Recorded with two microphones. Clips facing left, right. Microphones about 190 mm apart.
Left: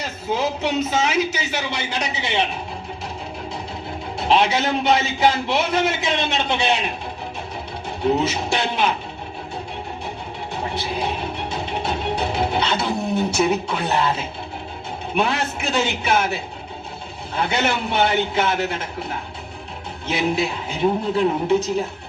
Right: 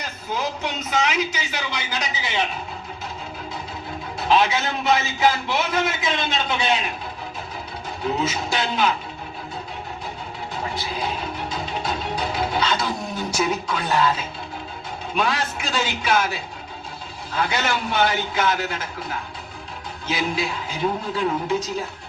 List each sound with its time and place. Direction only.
0.0 s a man's voice: 30° left (ahead or behind)
4.2 s a man's voice: 30° left (ahead or behind)
8.0 s a man's voice: 25° left (ahead or behind)
11.5 s music: 25° left (ahead or behind)
15.1 s a man's voice: 25° left (ahead or behind)
20.1 s a man's voice: 25° left (ahead or behind)